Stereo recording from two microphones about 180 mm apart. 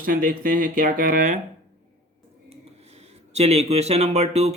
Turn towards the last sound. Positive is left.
turn(degrees=-35)  # may be behind; listen again after turning